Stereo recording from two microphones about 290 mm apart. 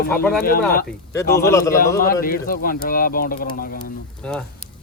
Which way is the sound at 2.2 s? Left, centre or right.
Left.